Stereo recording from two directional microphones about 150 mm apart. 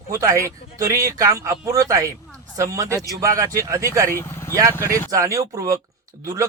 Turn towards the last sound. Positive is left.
turn(degrees=-20)  # may be behind; listen again after turning